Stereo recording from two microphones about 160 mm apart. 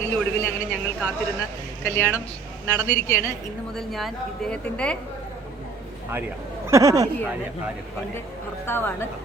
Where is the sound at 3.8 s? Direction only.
Centre (ahead or behind).